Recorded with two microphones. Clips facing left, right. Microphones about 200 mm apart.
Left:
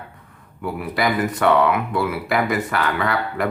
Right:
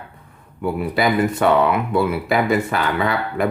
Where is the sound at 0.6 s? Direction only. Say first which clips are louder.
Right 3 dB; 25° right (ahead or behind).